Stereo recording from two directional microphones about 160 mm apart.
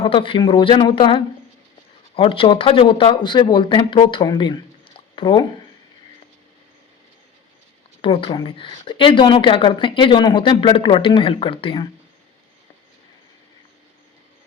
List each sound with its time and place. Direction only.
0.0 s speech: 30° left (ahead or behind)
8.0 s speech: 35° left (ahead or behind)